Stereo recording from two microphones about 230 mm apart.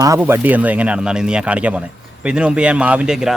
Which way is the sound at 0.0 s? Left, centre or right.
Centre.